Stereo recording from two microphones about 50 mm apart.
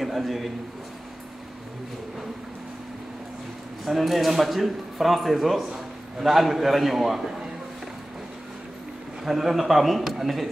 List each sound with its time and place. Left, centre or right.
0.0 s a man's voice: centre
3.8 s speech: centre
9.2 s speech: centre